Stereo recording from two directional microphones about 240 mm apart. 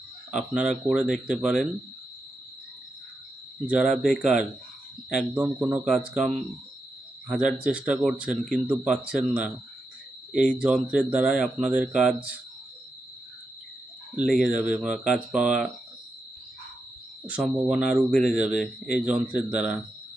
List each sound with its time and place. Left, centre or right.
0.3 s speech: centre
3.7 s speech: centre
7.3 s speech: centre
14.3 s speech: centre
17.2 s speech: centre